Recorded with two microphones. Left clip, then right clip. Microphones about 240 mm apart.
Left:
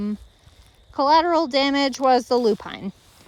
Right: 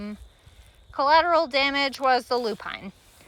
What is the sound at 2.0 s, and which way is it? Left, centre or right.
Speech, centre.